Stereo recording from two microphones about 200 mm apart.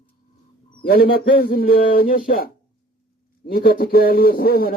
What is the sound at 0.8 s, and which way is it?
A man's voice, 50° left (ahead or behind).